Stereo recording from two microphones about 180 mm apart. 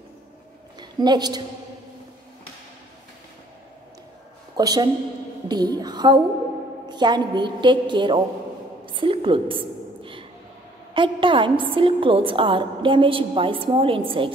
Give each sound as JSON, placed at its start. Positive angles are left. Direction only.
{"t": 0.7, "sound": "a woman's voice", "side_deg": -25}
{"t": 4.6, "sound": "a woman's voice", "side_deg": -20}
{"t": 8.8, "sound": "a sound", "side_deg": -30}
{"t": 10.9, "sound": "a woman's voice", "side_deg": -30}